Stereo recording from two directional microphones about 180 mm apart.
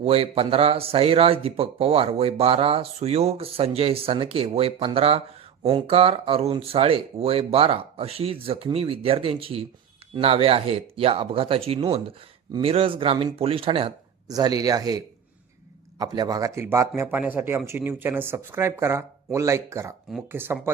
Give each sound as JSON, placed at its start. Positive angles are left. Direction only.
{"t": 0.0, "sound": "speech", "side_deg": -30}